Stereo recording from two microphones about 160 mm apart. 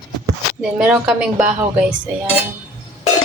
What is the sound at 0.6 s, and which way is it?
Speech, 5° right (ahead or behind).